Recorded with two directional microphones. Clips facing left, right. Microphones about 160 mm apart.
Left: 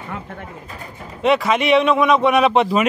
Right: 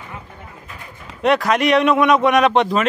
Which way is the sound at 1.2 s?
Centre (ahead or behind).